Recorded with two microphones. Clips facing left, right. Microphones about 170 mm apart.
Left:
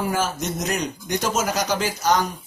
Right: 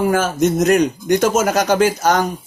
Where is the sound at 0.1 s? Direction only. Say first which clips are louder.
Right 9 dB; 50° right (ahead or behind).